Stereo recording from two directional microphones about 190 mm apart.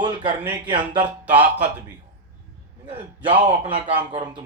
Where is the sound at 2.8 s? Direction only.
30° right (ahead or behind).